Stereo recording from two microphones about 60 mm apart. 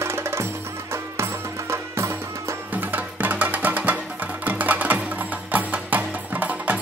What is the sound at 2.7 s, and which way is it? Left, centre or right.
Music, right.